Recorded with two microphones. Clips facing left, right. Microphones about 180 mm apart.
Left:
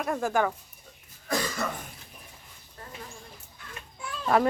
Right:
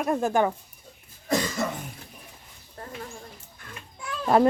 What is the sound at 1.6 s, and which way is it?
Cough, 20° right (ahead or behind).